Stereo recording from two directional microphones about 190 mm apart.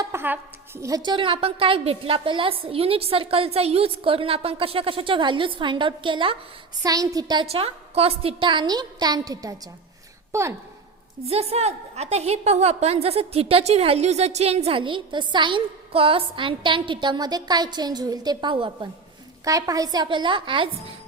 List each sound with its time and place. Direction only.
0.0 s a woman's voice: 15° right (ahead or behind)
11.3 s a woman's voice: 30° right (ahead or behind)